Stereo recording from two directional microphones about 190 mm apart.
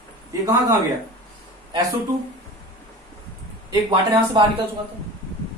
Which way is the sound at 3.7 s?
25° right (ahead or behind).